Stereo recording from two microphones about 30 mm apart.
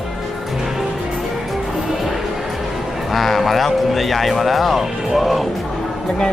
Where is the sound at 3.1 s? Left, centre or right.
Centre.